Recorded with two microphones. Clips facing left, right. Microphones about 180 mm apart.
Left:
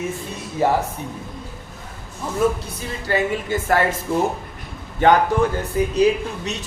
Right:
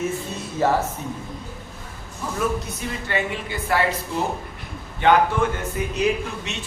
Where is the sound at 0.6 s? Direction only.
15° left (ahead or behind).